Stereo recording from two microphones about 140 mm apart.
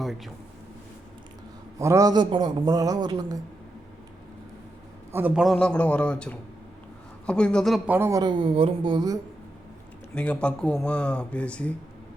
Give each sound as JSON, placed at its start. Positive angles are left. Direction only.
{"t": 1.8, "sound": "a man's voice", "side_deg": -20}
{"t": 5.1, "sound": "speech", "side_deg": -10}
{"t": 5.4, "sound": "speech", "side_deg": 5}
{"t": 7.9, "sound": "speech", "side_deg": -15}
{"t": 8.2, "sound": "speech", "side_deg": -35}
{"t": 10.2, "sound": "speech", "side_deg": 10}